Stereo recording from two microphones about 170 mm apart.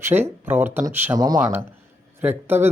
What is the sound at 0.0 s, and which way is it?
Speech, 10° right (ahead or behind).